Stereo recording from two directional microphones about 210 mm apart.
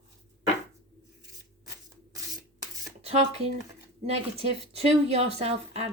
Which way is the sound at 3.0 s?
30° right (ahead or behind).